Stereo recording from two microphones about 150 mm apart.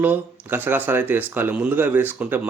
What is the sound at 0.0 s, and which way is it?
Speech, 10° right (ahead or behind).